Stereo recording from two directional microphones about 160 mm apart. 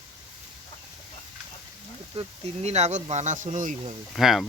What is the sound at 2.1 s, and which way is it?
Speech, 40° right (ahead or behind).